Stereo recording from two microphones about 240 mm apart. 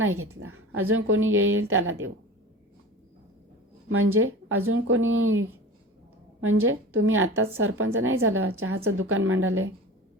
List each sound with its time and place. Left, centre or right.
0.0 s a woman's voice: right
3.8 s a woman's voice: right